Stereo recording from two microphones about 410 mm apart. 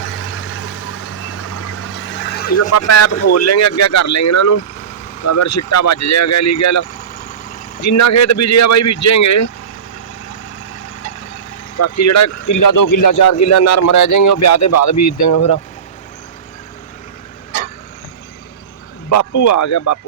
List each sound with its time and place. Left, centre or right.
0.0 s vehicle: left
2.7 s a man's voice: left
11.8 s a man's voice: left
19.1 s a man's voice: left